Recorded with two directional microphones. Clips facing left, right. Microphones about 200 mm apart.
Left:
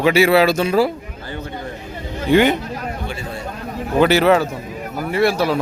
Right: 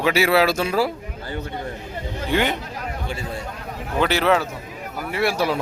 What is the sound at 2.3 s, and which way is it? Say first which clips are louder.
Speech: left 8 dB; 5° left (ahead or behind).